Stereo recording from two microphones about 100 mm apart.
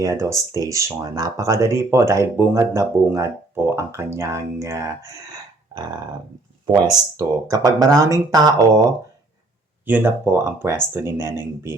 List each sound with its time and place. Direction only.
0.0 s speech: 30° right (ahead or behind)
7.2 s speech: 35° right (ahead or behind)
9.8 s speech: 20° right (ahead or behind)